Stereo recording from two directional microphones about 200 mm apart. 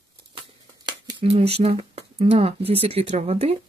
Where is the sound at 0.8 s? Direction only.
20° right (ahead or behind).